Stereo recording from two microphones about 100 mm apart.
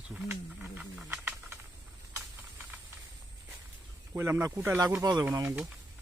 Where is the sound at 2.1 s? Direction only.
20° right (ahead or behind).